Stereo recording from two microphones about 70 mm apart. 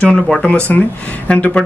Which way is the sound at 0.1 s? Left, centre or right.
Centre.